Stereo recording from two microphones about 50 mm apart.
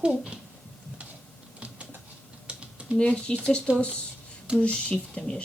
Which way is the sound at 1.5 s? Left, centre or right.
Right.